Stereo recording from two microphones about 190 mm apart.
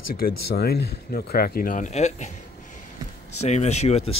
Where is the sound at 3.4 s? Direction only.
35° left (ahead or behind).